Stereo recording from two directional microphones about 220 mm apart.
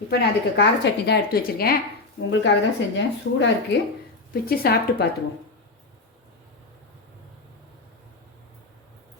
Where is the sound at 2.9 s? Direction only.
50° left (ahead or behind).